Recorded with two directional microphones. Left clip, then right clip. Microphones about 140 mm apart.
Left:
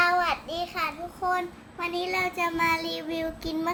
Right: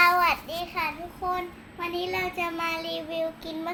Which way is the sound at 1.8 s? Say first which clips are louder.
Left 1 dB; 30° left (ahead or behind).